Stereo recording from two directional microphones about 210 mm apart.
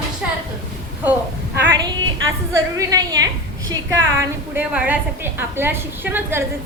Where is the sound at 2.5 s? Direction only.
15° right (ahead or behind).